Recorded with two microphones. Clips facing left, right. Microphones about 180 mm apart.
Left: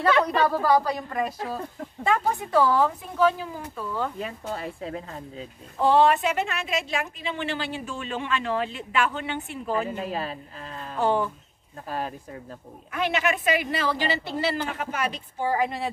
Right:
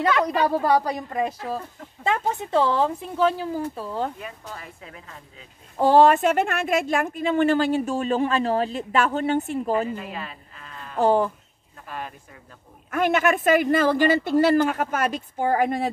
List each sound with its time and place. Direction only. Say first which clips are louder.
0.4 s a woman's voice: right 1 dB; 20° right (ahead or behind)
4.2 s speech: left 6 dB; 30° left (ahead or behind)
5.8 s a woman's voice: right 4 dB; 50° right (ahead or behind)
9.9 s a woman's voice: left 4 dB; 35° left (ahead or behind)
11.0 s speech: right 4 dB; 40° right (ahead or behind)
12.9 s a woman's voice: right 5 dB; 50° right (ahead or behind)